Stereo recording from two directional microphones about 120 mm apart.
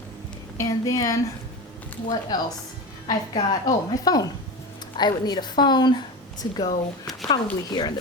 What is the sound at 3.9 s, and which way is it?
Speech, 30° left (ahead or behind).